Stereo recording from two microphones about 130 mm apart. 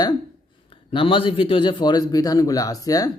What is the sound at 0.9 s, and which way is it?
A man's voice, 40° left (ahead or behind).